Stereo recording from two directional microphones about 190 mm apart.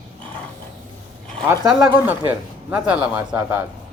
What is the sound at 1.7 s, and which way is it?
Speech, 10° right (ahead or behind).